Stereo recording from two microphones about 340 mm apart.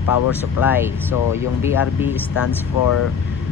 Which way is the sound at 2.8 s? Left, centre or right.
Left.